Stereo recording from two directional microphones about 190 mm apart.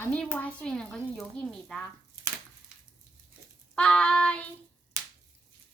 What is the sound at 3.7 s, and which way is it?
Child singing, 5° left (ahead or behind).